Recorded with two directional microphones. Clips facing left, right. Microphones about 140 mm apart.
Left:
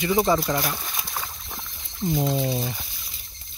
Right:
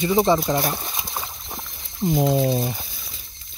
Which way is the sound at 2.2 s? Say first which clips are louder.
Right 7 dB; 55° right (ahead or behind).